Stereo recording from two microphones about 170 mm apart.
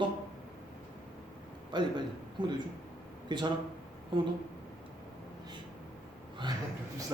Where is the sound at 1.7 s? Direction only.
25° right (ahead or behind).